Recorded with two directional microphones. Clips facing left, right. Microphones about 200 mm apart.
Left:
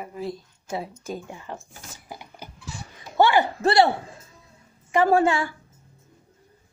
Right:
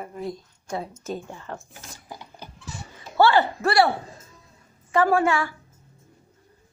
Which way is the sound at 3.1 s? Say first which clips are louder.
Even; 15° left (ahead or behind).